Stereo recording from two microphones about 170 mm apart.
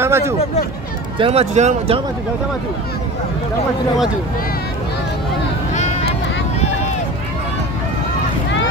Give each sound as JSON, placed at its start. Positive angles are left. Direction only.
{"t": 0.0, "sound": "speech", "side_deg": -15}
{"t": 1.1, "sound": "speech", "side_deg": -35}